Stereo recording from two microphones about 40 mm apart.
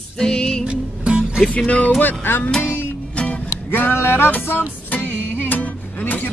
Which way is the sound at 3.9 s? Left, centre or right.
Left.